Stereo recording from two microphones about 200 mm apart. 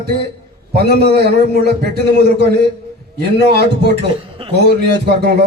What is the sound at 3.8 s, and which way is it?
Speech, 55° right (ahead or behind).